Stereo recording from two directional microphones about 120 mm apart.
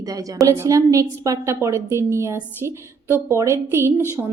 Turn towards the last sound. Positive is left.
turn(degrees=-20)  # may be behind; listen again after turning